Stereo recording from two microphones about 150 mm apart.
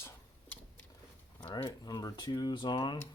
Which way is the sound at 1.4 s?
30° left (ahead or behind).